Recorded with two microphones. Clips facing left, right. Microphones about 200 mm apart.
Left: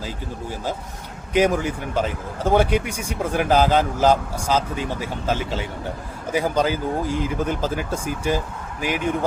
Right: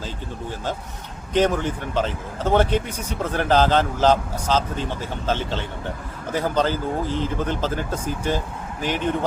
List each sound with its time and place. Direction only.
1.3 s a man's voice: 10° left (ahead or behind)